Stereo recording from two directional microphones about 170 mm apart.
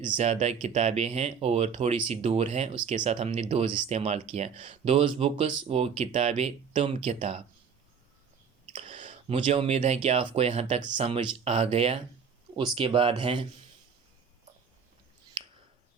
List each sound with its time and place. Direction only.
0.2 s speech: 40° right (ahead or behind)
8.7 s a sound: 30° right (ahead or behind)
9.0 s speech: 40° right (ahead or behind)